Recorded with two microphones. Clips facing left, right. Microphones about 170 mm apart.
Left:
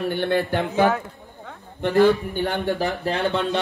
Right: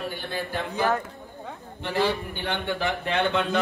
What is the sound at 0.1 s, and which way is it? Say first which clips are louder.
Speech: left 9 dB; 70° left (ahead or behind).